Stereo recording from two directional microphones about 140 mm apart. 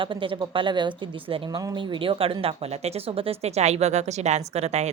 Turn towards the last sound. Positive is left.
turn(degrees=-50)  # may be behind; listen again after turning